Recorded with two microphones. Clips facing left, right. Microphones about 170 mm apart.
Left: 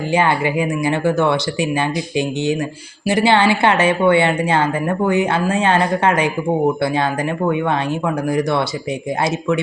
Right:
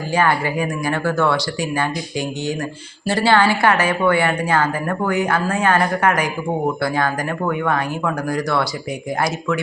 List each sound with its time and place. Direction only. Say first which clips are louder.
0.1 s speech: left 1 dB; 20° left (ahead or behind)